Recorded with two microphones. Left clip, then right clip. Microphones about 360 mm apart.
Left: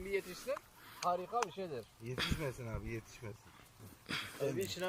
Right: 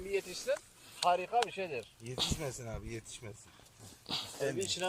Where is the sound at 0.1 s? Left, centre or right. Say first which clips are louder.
Right 4 dB; right.